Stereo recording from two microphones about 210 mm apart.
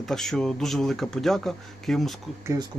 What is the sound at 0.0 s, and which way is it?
Speech, centre (ahead or behind).